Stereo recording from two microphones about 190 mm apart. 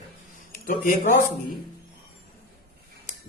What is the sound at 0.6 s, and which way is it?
Speech, 50° left (ahead or behind).